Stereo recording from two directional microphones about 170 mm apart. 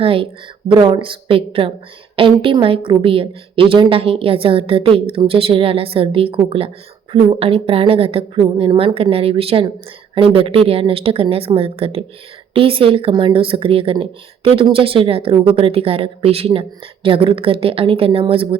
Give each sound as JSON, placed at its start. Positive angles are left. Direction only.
{"t": 0.0, "sound": "speech", "side_deg": -30}